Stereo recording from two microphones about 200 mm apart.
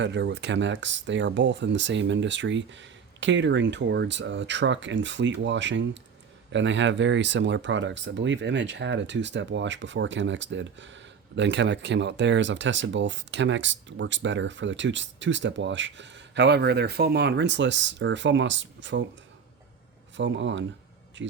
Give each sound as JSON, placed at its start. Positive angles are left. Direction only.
{"t": 0.0, "sound": "speech", "side_deg": -60}
{"t": 20.1, "sound": "speech", "side_deg": -65}